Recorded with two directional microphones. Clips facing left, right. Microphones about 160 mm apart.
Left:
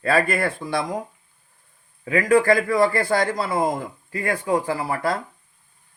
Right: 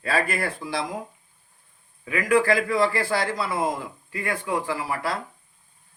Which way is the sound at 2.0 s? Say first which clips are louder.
Left 4 dB; 40° left (ahead or behind).